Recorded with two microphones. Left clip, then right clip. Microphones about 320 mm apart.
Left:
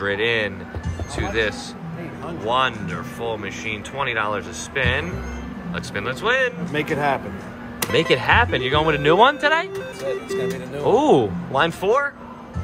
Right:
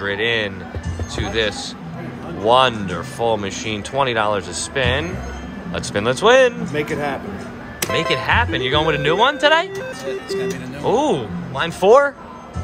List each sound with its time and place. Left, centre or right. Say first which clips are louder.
0.0 s speech: right 1 dB; centre
6.7 s speech: left 1 dB; centre
7.8 s speech: even; centre
10.0 s speech: even; centre
10.8 s speech: left 2 dB; centre